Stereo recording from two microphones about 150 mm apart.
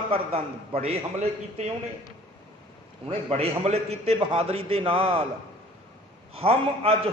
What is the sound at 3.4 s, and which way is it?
A man's voice, 45° right (ahead or behind).